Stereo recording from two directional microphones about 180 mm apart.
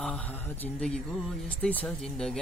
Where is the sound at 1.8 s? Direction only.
5° left (ahead or behind).